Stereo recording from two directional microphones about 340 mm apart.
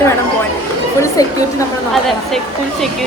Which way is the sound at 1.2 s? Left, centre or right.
Centre.